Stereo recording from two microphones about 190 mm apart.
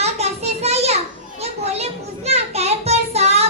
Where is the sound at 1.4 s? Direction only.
35° right (ahead or behind).